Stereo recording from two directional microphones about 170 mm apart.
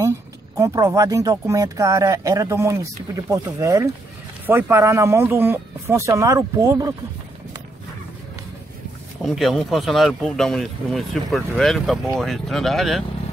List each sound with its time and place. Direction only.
0.6 s speech: 20° right (ahead or behind)
9.2 s speech: centre (ahead or behind)